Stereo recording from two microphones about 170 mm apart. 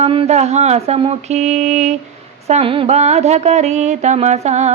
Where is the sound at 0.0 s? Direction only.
35° right (ahead or behind).